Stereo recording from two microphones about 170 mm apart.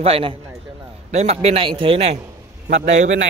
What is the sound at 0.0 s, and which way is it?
A man's voice, 35° right (ahead or behind).